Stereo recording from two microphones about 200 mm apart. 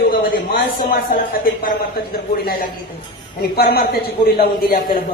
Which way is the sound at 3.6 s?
50° left (ahead or behind).